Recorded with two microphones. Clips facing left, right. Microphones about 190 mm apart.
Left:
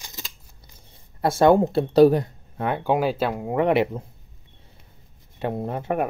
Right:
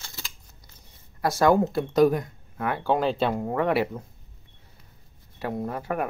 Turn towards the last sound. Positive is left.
turn(degrees=25)  # may be behind; listen again after turning